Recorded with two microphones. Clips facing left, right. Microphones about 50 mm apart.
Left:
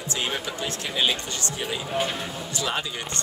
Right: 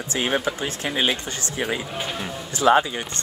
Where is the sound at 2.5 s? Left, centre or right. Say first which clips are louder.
Right 12 dB; right.